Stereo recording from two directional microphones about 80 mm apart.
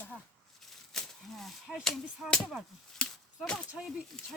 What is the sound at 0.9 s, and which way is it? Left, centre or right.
Speech, centre.